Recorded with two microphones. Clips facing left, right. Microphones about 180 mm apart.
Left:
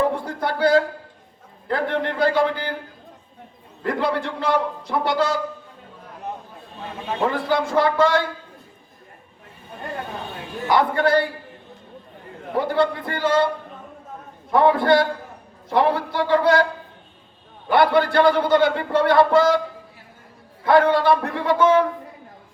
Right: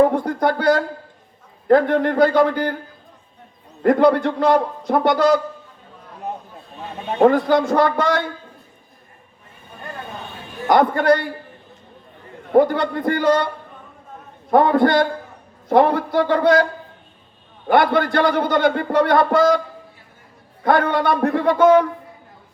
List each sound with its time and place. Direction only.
0.0 s a sound: 50° right (ahead or behind)
1.6 s a man's voice: 50° right (ahead or behind)
3.8 s a man's voice: 50° right (ahead or behind)
7.2 s a man's voice: 55° right (ahead or behind)
10.7 s a man's voice: 50° right (ahead or behind)
12.5 s a man's voice: 50° right (ahead or behind)
14.5 s a man's voice: 50° right (ahead or behind)
17.7 s a man's voice: 50° right (ahead or behind)
20.7 s a man's voice: 50° right (ahead or behind)